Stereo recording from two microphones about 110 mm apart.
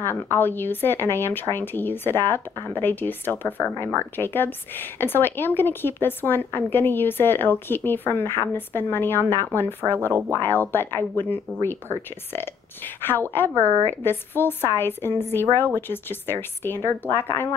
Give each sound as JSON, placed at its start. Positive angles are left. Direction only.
{"t": 0.0, "sound": "speech", "side_deg": 20}
{"t": 14.0, "sound": "speech", "side_deg": 20}